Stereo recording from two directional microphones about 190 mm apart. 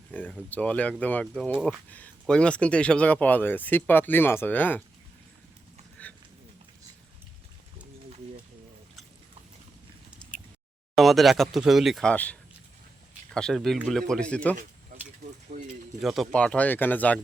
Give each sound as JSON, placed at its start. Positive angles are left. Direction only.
{"t": 0.1, "sound": "speech", "side_deg": 10}
{"t": 10.9, "sound": "speech", "side_deg": 0}
{"t": 15.5, "sound": "a sound", "side_deg": -40}
{"t": 16.0, "sound": "speech", "side_deg": 0}